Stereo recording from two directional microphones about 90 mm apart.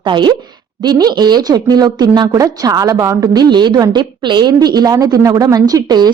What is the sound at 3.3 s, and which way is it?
A woman's voice, 55° right (ahead or behind).